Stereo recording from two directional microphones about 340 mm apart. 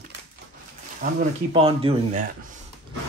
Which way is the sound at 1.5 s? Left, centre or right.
Centre.